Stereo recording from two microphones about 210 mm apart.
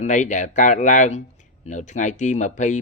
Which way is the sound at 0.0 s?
35° left (ahead or behind).